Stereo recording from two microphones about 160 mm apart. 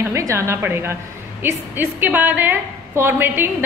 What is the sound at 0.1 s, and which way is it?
A woman's voice, 20° right (ahead or behind).